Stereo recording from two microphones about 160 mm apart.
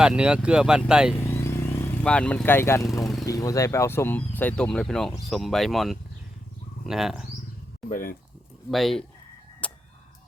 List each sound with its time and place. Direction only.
0.0 s speech: 5° right (ahead or behind)
1.1 s vehicle: 15° left (ahead or behind)
3.2 s speech: 20° left (ahead or behind); by 7.3 s 5° right (ahead or behind)
7.9 s speech: 60° left (ahead or behind)
8.7 s speech: centre (ahead or behind)
9.6 s a sound: 10° left (ahead or behind)